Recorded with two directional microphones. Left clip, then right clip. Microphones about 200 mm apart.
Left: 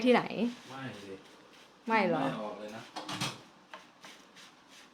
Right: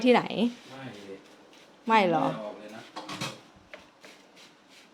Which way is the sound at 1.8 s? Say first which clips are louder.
Right 6 dB; 25° right (ahead or behind).